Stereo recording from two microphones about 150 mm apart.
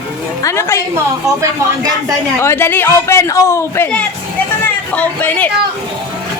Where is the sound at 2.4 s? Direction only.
15° left (ahead or behind).